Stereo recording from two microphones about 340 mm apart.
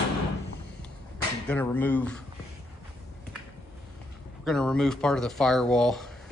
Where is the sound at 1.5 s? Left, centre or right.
Centre.